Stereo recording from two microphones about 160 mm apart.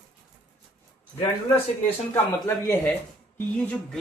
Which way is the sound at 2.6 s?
15° left (ahead or behind).